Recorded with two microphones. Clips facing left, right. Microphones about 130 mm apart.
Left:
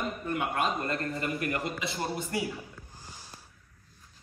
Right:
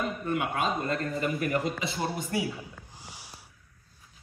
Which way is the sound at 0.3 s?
5° right (ahead or behind).